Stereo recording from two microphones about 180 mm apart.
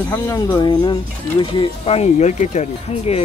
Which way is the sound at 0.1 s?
15° left (ahead or behind).